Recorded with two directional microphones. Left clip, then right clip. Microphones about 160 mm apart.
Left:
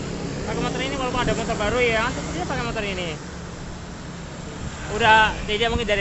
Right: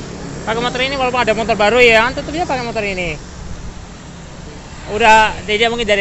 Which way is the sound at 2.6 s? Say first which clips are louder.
Right 7 dB; 25° right (ahead or behind).